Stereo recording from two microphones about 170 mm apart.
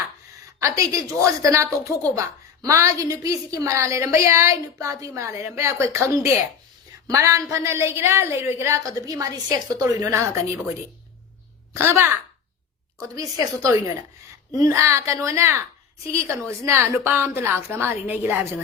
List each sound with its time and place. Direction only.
0.6 s a woman's voice: 20° right (ahead or behind)
7.1 s a woman's voice: 20° right (ahead or behind)
11.7 s a woman's voice: 15° right (ahead or behind)